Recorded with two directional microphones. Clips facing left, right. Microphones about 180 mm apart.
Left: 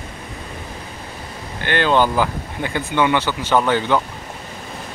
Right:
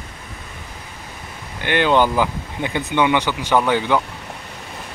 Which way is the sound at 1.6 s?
15° right (ahead or behind).